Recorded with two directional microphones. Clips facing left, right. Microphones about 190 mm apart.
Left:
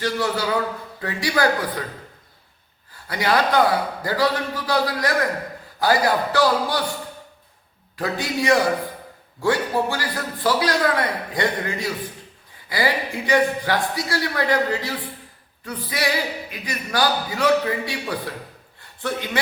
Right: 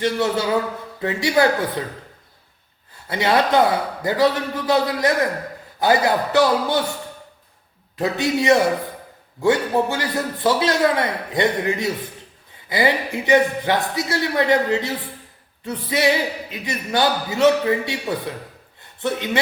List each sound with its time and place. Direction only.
0.0 s a man's voice: 25° right (ahead or behind)
2.9 s a man's voice: 25° right (ahead or behind)
7.9 s a man's voice: 20° right (ahead or behind)
18.8 s a sound: 20° right (ahead or behind)